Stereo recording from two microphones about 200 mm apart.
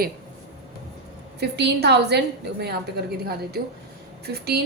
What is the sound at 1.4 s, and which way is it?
A woman's voice, 55° right (ahead or behind).